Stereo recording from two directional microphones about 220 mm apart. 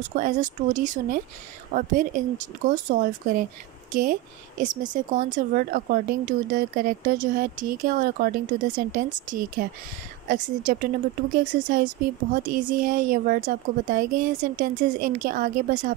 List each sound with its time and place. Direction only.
0.1 s speech: 35° right (ahead or behind)